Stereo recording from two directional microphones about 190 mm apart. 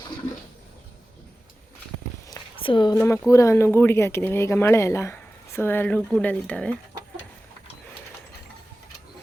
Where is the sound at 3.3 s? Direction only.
15° left (ahead or behind).